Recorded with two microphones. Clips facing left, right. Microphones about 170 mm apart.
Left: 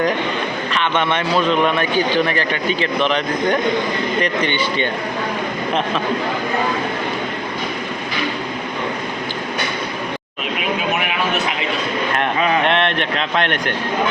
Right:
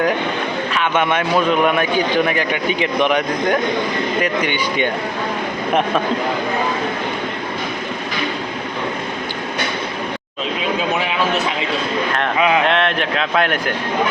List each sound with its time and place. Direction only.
0.7 s a man's voice: 5° right (ahead or behind)
10.8 s a sound: 25° right (ahead or behind)
12.6 s speech: centre (ahead or behind)